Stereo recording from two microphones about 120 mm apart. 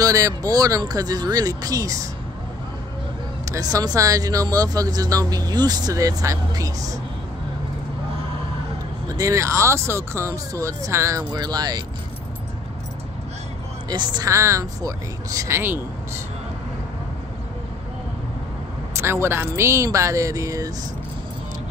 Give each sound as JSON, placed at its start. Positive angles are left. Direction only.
{"t": 0.0, "sound": "speech", "side_deg": -30}
{"t": 3.4, "sound": "speech", "side_deg": -30}
{"t": 9.1, "sound": "speech", "side_deg": -30}
{"t": 13.8, "sound": "speech", "side_deg": -35}
{"t": 14.3, "sound": "speech", "side_deg": -25}
{"t": 18.9, "sound": "speech", "side_deg": -20}